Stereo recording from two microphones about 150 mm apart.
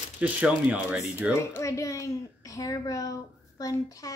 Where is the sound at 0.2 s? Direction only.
10° right (ahead or behind).